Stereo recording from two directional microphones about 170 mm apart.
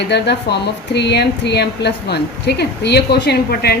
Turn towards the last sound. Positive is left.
turn(degrees=70)  # may be behind; listen again after turning